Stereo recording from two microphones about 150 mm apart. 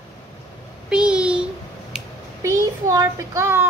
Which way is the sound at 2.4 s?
20° right (ahead or behind).